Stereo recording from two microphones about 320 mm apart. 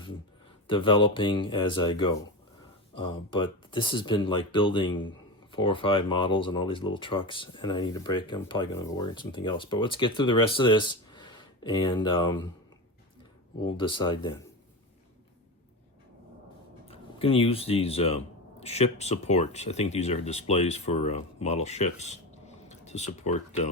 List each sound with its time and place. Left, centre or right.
0.7 s speech: centre
13.6 s speech: centre
16.9 s speech: centre